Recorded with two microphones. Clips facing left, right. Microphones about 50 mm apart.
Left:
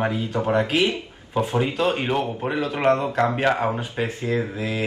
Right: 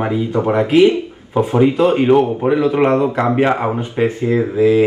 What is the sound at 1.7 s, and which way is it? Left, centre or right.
Speech, right.